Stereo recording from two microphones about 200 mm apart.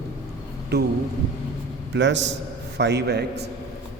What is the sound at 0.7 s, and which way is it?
Speech, 55° right (ahead or behind).